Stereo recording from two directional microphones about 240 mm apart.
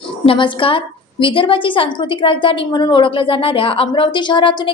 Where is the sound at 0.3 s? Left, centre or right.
Left.